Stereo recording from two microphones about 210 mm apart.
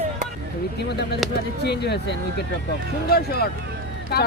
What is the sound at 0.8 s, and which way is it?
Speech, 50° left (ahead or behind).